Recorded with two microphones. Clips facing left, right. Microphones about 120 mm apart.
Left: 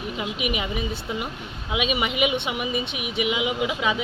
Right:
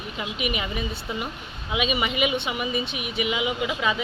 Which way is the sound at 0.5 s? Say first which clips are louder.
Left 2 dB; 15° left (ahead or behind).